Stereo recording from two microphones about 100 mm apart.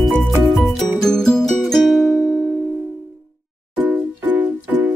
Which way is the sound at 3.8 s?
15° right (ahead or behind).